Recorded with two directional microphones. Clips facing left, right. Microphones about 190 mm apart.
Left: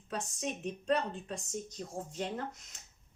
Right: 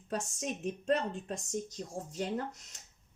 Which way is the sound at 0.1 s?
45° right (ahead or behind).